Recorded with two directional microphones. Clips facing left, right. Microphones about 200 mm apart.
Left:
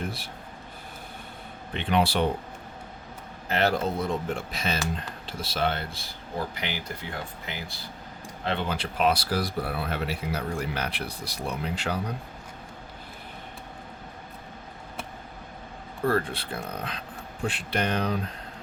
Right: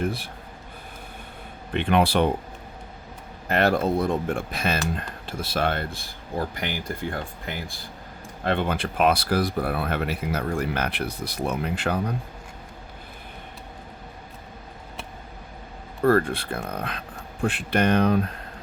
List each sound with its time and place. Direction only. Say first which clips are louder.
1.7 s speech: right 4 dB; 55° right (ahead or behind)
3.5 s speech: right 4 dB; 55° right (ahead or behind)
16.0 s speech: right 6 dB; 55° right (ahead or behind)